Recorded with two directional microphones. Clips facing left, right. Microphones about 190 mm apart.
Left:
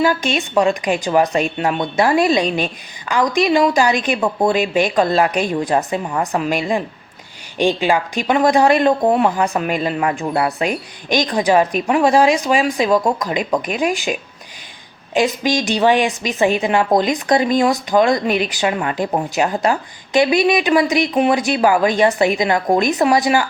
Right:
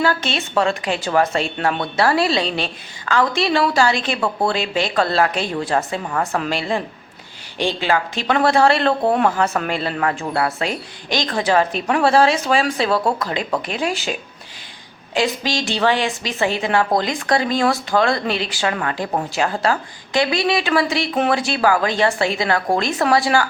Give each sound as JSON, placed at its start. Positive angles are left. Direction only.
{"t": 0.0, "sound": "a woman's voice", "side_deg": 15}